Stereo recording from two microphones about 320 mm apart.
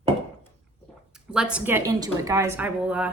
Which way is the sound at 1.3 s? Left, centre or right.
Centre.